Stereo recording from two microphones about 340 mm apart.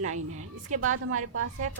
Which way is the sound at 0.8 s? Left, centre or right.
Right.